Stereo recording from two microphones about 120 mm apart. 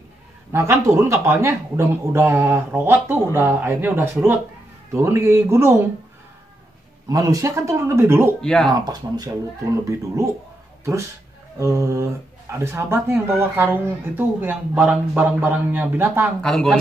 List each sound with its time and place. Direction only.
0.5 s speech: 20° right (ahead or behind)
7.1 s speech: 30° right (ahead or behind)
8.4 s speech: 5° left (ahead or behind)
8.7 s speech: 35° right (ahead or behind)
11.5 s speech: 25° right (ahead or behind)
16.4 s speech: 5° left (ahead or behind)